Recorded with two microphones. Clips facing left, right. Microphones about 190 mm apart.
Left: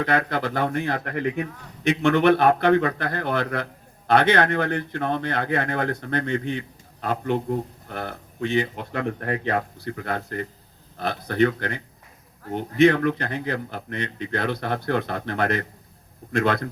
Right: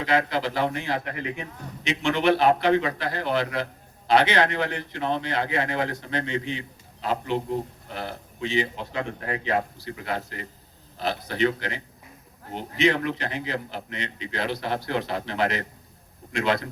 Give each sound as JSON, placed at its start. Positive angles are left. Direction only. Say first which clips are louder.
{"t": 0.0, "sound": "a man's voice", "louder": "left 1 dB", "side_deg": 55}